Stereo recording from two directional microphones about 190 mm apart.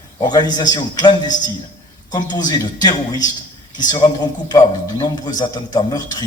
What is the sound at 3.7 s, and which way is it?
A man's voice, 20° left (ahead or behind).